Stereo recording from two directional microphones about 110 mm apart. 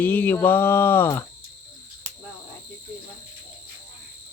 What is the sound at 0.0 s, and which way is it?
Speech, 15° left (ahead or behind).